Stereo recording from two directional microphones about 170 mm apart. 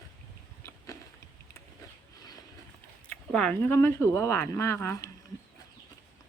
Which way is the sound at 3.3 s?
5° left (ahead or behind).